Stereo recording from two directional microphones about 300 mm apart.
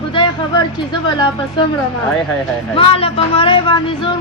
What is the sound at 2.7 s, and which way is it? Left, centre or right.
Speech, centre.